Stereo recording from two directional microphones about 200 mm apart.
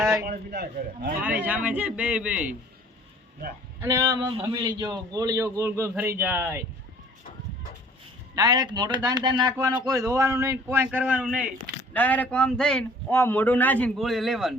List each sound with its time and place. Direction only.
0.0 s a sound: 15° right (ahead or behind)
0.3 s a man's voice: 50° right (ahead or behind)
1.2 s a man's voice: 10° right (ahead or behind)
3.8 s a man's voice: 15° right (ahead or behind)
8.4 s a man's voice: 20° right (ahead or behind); by 11.4 s 5° right (ahead or behind)
11.9 s speech: 10° left (ahead or behind)